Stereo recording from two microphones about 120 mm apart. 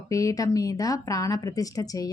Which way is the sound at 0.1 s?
30° left (ahead or behind).